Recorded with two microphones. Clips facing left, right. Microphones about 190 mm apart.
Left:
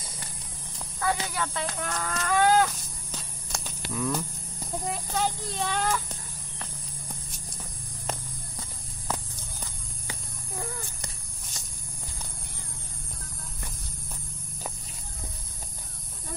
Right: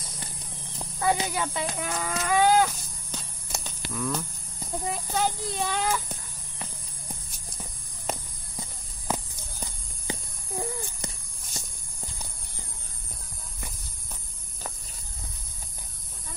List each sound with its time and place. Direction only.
0.7 s livestock: 20° right (ahead or behind); by 4.3 s 5° left (ahead or behind)
4.8 s speech: 5° right (ahead or behind)
8.1 s a sound: 15° right (ahead or behind)